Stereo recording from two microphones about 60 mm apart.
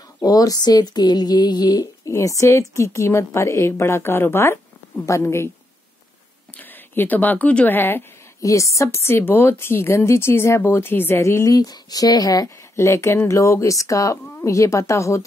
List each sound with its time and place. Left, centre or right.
0.2 s a sound: left
2.1 s a woman's voice: left
5.0 s a woman's voice: left
6.5 s speech: left
8.4 s a woman's voice: left
11.1 s a woman's voice: left
11.4 s a sound: left
12.7 s a woman's voice: left